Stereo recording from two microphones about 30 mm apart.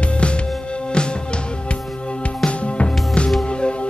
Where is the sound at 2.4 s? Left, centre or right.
Left.